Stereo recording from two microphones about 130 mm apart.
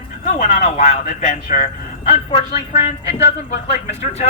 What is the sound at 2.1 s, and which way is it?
Speech, 50° left (ahead or behind).